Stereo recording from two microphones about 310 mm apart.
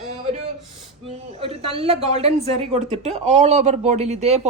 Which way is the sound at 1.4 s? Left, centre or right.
Centre.